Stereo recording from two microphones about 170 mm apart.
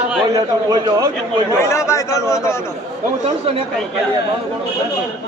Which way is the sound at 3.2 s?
30° right (ahead or behind).